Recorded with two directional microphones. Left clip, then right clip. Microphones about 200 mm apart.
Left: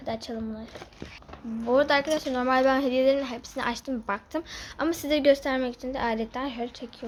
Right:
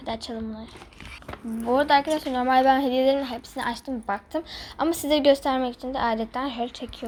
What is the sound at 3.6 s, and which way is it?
A woman's voice, 15° left (ahead or behind).